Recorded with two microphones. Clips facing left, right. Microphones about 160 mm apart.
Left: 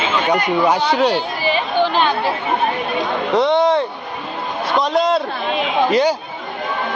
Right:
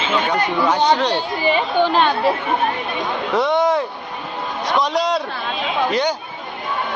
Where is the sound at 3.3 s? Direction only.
25° left (ahead or behind).